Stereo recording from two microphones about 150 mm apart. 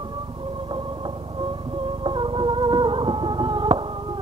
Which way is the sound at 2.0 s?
35° right (ahead or behind).